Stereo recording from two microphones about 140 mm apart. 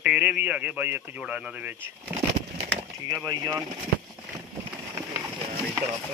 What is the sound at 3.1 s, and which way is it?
Speech, 30° right (ahead or behind).